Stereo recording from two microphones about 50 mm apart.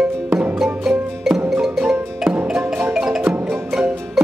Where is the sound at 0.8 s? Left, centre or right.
Centre.